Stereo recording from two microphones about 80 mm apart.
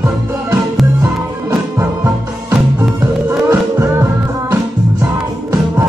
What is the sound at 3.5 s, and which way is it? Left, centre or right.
Music, right.